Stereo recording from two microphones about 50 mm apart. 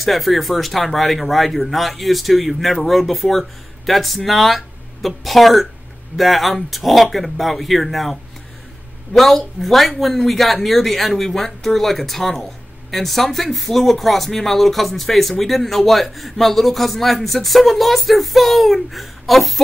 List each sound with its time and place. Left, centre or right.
0.0 s speech: centre